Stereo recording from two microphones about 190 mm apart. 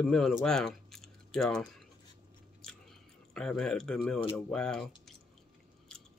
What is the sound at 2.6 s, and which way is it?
Chewing, 5° left (ahead or behind).